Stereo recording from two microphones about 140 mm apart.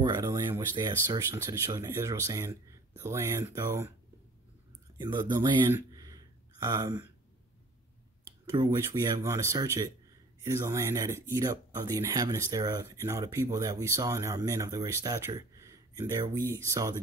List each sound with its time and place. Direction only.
0.0 s speech: 25° right (ahead or behind)
4.9 s speech: 30° right (ahead or behind)
5.7 s a sound: 25° right (ahead or behind)
8.6 s speech: 25° right (ahead or behind)